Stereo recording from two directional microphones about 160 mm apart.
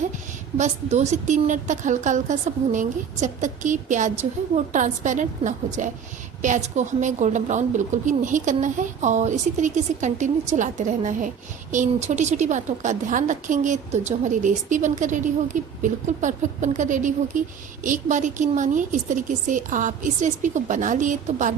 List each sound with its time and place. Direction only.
0.5 s a woman's voice: 45° right (ahead or behind)